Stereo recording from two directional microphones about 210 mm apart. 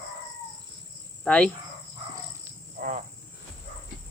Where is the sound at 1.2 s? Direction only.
5° left (ahead or behind).